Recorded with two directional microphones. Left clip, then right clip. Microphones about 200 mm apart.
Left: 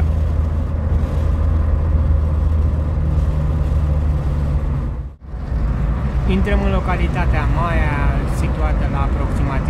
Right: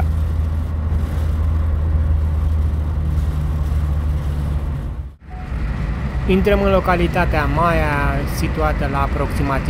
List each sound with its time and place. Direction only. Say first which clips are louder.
6.2 s speech: right 6 dB; 15° right (ahead or behind)